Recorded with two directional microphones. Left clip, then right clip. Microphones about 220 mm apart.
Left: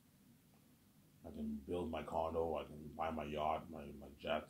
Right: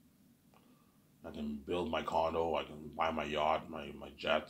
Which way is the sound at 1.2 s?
20° right (ahead or behind).